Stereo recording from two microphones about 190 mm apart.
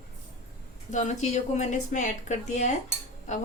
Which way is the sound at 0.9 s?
40° left (ahead or behind).